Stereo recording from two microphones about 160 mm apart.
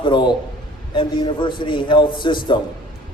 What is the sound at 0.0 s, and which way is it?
A man's voice, 30° left (ahead or behind).